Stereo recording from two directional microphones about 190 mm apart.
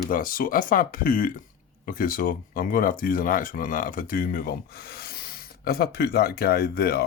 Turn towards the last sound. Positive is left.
turn(degrees=55)  # may be behind; listen again after turning